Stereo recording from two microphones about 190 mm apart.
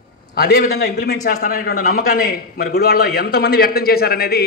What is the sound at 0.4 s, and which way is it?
A man's voice, 55° left (ahead or behind).